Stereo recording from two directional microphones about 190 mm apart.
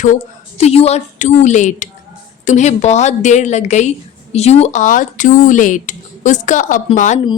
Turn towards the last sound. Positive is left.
turn(degrees=40)  # may be behind; listen again after turning